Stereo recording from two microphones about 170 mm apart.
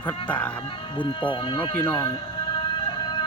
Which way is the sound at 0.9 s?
30° left (ahead or behind).